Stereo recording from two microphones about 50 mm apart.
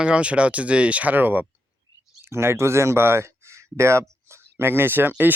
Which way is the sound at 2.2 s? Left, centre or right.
Right.